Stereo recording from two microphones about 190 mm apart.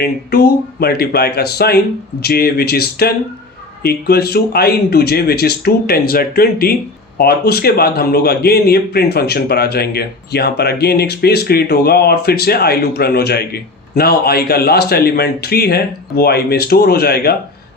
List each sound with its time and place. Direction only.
0.0 s speech: 55° left (ahead or behind)